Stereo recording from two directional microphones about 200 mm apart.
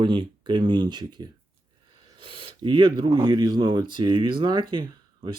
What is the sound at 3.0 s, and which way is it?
Speech, 20° right (ahead or behind).